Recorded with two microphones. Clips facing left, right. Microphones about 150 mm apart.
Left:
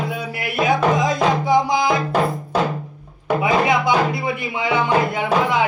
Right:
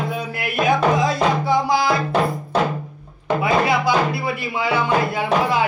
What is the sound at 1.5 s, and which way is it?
Music, 20° left (ahead or behind).